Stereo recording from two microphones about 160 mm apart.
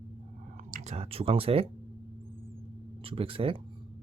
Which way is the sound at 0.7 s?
40° right (ahead or behind).